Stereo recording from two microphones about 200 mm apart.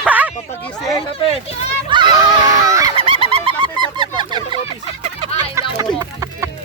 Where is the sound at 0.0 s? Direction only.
5° right (ahead or behind).